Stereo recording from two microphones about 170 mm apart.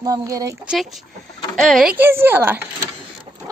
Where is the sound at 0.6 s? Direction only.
Centre (ahead or behind).